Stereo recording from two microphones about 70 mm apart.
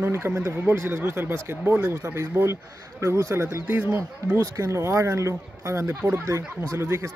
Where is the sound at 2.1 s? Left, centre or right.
Right.